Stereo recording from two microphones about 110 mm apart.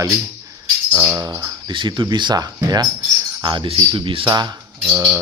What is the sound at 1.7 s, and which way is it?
Speech, 45° right (ahead or behind).